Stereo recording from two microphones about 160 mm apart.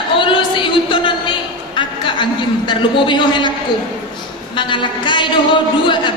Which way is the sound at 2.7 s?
30° left (ahead or behind).